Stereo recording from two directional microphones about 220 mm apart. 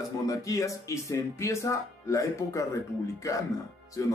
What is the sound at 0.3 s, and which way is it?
Speech, 15° left (ahead or behind).